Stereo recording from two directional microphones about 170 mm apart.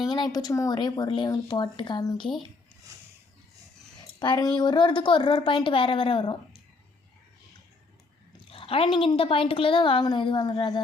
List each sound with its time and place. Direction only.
0.1 s a woman's voice: 25° left (ahead or behind)
4.2 s a woman's voice: 25° left (ahead or behind)
8.4 s a woman's voice: 30° left (ahead or behind)